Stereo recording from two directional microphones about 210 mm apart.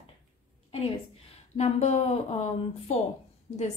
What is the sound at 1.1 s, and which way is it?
A woman's voice, 30° left (ahead or behind).